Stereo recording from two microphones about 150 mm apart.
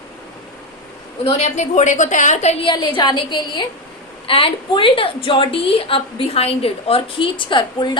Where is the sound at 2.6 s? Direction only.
30° left (ahead or behind).